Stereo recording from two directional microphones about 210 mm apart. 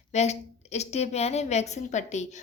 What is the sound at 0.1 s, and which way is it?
A woman's voice, 30° left (ahead or behind).